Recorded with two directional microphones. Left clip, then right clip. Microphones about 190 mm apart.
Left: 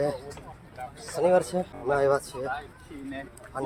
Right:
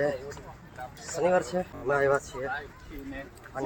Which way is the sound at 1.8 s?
10° left (ahead or behind).